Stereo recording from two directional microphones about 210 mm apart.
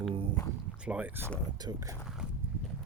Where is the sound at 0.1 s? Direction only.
25° right (ahead or behind).